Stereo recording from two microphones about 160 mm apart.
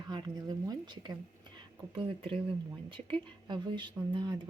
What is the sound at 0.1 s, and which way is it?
Speech, 25° right (ahead or behind).